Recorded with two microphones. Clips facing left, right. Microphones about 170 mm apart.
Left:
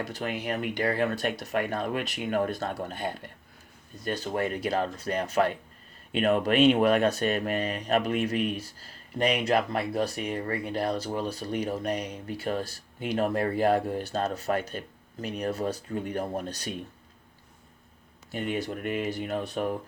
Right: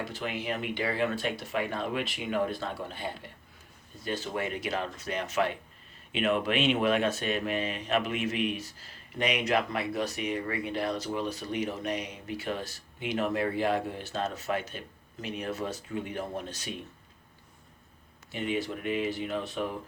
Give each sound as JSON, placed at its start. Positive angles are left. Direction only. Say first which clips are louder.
{"t": 0.0, "sound": "speech", "louder": "left 2 dB", "side_deg": 45}
{"t": 18.3, "sound": "speech", "louder": "left 1 dB", "side_deg": 45}